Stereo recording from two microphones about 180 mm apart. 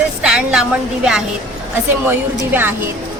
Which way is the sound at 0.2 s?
5° right (ahead or behind).